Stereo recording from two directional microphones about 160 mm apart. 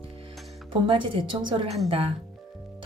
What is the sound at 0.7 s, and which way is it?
Speech, 30° right (ahead or behind).